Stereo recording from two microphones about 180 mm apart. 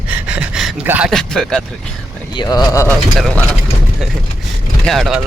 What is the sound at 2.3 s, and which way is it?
Speech, 25° left (ahead or behind).